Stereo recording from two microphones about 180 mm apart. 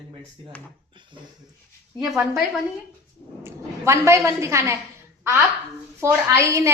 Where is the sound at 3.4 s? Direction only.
15° right (ahead or behind).